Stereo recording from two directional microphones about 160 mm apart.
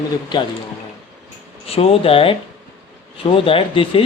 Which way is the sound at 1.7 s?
40° left (ahead or behind).